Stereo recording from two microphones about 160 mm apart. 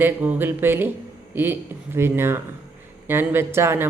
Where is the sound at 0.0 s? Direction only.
10° right (ahead or behind).